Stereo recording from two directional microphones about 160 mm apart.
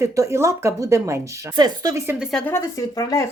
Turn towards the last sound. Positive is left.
turn(degrees=20)  # may be behind; listen again after turning